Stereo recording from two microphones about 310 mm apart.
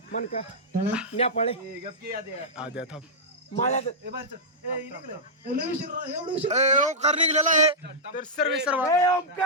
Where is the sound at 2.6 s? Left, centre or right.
Centre.